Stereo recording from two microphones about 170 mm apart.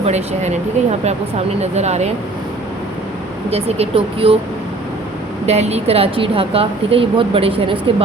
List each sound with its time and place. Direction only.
0.0 s speech: 40° right (ahead or behind)
3.5 s speech: 35° right (ahead or behind)
5.5 s speech: 40° right (ahead or behind)